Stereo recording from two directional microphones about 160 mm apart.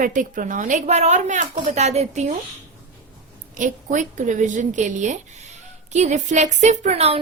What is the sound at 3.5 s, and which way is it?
A woman's voice, 50° right (ahead or behind).